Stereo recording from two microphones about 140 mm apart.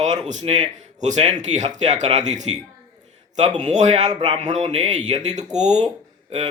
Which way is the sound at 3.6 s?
55° right (ahead or behind).